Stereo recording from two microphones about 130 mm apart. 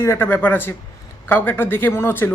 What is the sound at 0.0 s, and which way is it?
Speech, 20° left (ahead or behind).